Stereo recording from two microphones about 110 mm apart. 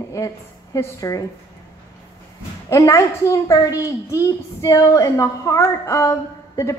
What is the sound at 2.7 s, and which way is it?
A woman's voice, 25° left (ahead or behind).